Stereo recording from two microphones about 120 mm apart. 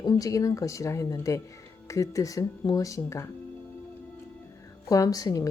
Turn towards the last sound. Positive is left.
turn(degrees=30)  # may be behind; listen again after turning